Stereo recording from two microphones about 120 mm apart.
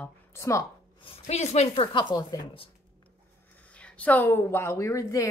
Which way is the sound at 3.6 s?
10° left (ahead or behind).